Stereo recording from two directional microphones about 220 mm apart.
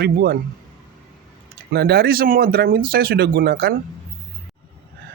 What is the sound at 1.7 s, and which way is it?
Speech, 45° right (ahead or behind).